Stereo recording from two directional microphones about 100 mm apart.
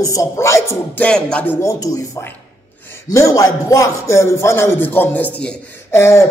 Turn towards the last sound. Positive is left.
turn(degrees=25)  # may be behind; listen again after turning